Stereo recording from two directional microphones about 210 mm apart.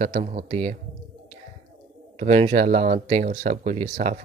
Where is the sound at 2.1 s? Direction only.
30° right (ahead or behind).